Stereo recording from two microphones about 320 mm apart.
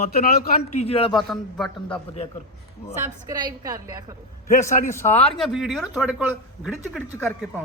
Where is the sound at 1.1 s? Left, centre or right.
Centre.